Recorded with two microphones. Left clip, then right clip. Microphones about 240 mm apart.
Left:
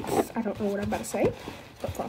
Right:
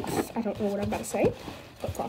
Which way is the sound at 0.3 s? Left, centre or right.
Centre.